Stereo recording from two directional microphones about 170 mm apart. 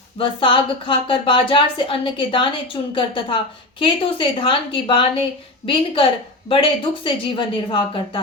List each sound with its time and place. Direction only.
0.2 s a woman's voice: 30° left (ahead or behind)